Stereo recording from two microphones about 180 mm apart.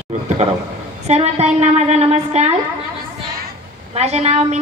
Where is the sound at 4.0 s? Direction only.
35° right (ahead or behind).